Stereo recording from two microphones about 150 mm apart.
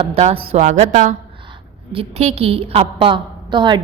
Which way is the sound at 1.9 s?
40° right (ahead or behind).